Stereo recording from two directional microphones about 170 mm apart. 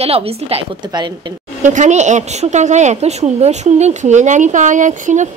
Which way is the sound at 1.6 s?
45° right (ahead or behind).